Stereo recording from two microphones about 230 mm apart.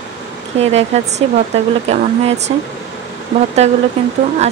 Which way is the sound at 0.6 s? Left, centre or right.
Right.